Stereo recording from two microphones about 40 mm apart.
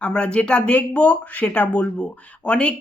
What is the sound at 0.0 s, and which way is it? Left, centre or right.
A woman's voice, left.